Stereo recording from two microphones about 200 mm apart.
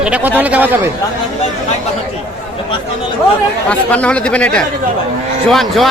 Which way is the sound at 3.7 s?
5° left (ahead or behind).